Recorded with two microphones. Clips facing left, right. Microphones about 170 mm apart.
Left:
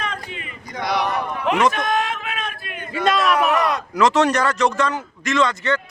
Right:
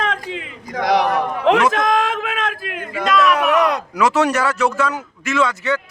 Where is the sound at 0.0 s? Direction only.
90° right.